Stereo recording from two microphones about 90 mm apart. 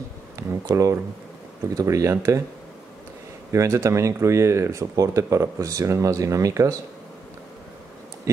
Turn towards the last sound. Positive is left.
turn(degrees=-35)  # may be behind; listen again after turning